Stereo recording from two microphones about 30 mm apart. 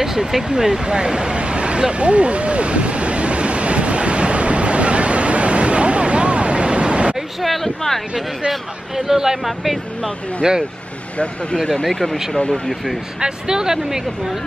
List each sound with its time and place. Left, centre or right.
0.0 s speech: centre
0.7 s a sound: right
7.4 s speech: centre
8.5 s speech: centre
9.4 s speech: centre
10.4 s speech: right
11.5 s speech: left
12.6 s speech: centre
13.2 s speech: right